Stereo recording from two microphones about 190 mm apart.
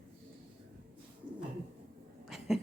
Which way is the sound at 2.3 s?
Centre (ahead or behind).